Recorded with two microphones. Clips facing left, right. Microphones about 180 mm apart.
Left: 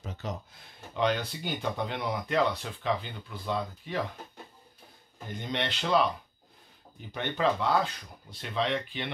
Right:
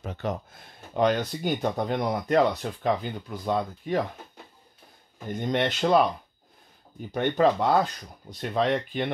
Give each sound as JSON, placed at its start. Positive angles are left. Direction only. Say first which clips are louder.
{"t": 0.0, "sound": "speech", "louder": "right 7 dB", "side_deg": -60}
{"t": 0.9, "sound": "speech", "louder": "right 5 dB", "side_deg": -45}
{"t": 5.3, "sound": "speech", "louder": "right 7 dB", "side_deg": -50}
{"t": 7.2, "sound": "speech", "louder": "right 6 dB", "side_deg": -45}